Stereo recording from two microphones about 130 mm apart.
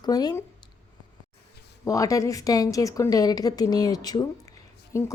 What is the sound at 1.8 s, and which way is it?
A woman's voice, 25° left (ahead or behind).